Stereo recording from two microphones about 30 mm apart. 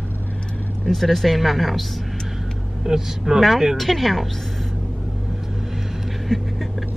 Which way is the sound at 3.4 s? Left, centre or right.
Centre.